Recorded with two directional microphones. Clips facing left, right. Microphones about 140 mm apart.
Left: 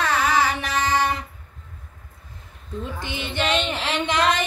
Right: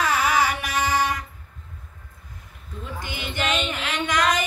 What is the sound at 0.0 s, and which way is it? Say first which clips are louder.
Carnatic music: left 1 dB; 10° right (ahead or behind).